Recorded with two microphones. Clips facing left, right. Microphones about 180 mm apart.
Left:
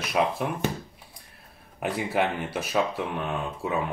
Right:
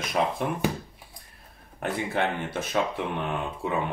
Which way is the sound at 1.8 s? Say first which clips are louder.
Left 1 dB; 10° left (ahead or behind).